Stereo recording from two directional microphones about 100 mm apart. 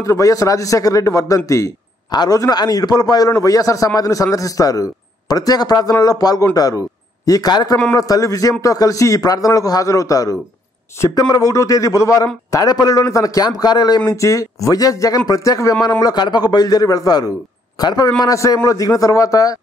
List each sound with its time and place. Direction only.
0.0 s a man's voice: 35° left (ahead or behind)
14.1 s speech: 35° left (ahead or behind)
16.0 s speech: 45° left (ahead or behind)